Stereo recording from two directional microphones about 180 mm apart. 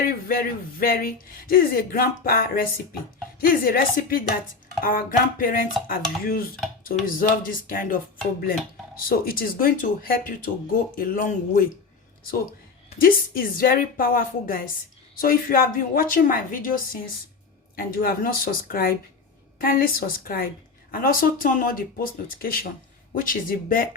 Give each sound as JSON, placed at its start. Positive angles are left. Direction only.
{"t": 0.3, "sound": "speech", "side_deg": 55}
{"t": 13.0, "sound": "speech", "side_deg": 50}